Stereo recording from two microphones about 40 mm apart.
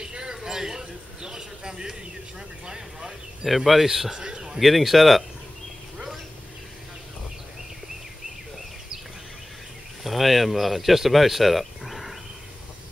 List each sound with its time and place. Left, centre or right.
0.0 s a sound: centre
2.6 s vehicle: centre
3.4 s a man's voice: centre
4.5 s speech: centre
10.0 s speech: centre